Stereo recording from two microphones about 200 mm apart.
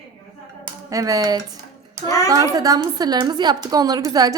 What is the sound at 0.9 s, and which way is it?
A woman's voice, 15° right (ahead or behind).